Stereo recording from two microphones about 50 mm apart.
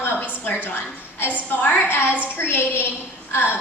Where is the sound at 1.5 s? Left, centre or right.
Left.